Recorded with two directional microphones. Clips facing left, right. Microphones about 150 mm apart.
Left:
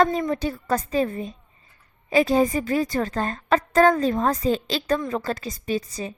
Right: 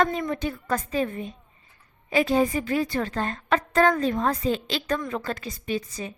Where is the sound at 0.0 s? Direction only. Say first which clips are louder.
Left 3 dB; 35° left (ahead or behind).